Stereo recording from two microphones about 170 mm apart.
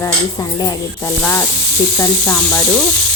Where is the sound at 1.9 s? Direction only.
10° left (ahead or behind).